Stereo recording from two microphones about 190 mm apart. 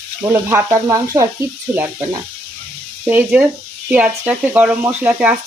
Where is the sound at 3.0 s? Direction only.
10° right (ahead or behind).